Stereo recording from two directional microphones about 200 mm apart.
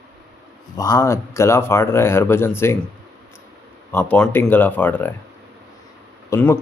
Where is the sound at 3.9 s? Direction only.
10° left (ahead or behind).